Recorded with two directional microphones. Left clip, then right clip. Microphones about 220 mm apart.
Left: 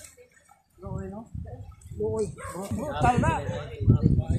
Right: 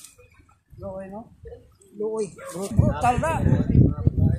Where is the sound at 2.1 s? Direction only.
40° right (ahead or behind).